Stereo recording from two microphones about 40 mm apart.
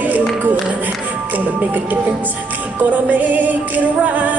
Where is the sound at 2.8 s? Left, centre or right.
Right.